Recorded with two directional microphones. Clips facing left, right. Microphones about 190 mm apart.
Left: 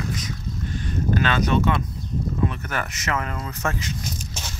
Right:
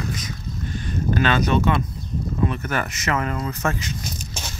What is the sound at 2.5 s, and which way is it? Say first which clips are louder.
Speech: right 4 dB; 35° right (ahead or behind).